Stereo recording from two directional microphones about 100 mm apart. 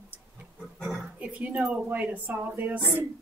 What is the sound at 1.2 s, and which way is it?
Speech, 15° right (ahead or behind).